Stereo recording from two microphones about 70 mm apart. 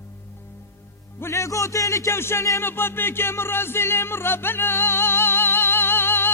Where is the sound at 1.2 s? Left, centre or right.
Left.